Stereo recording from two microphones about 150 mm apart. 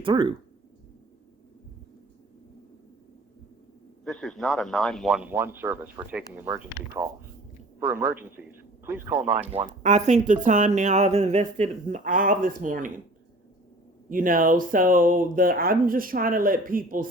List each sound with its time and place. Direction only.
0.0 s speech: 30° right (ahead or behind)
4.0 s a man's voice: 5° left (ahead or behind)
9.8 s speech: 50° right (ahead or behind)
14.1 s speech: 65° right (ahead or behind)